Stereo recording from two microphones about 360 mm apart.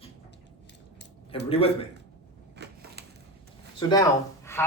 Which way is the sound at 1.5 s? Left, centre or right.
Centre.